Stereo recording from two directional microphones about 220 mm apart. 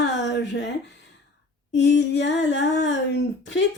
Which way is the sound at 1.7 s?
55° left (ahead or behind).